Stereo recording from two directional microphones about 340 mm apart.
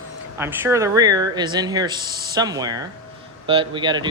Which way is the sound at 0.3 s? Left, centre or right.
Centre.